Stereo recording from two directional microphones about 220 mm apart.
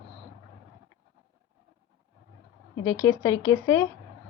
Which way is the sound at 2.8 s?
15° left (ahead or behind).